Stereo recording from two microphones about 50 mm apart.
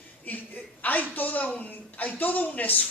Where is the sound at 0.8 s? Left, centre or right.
Left.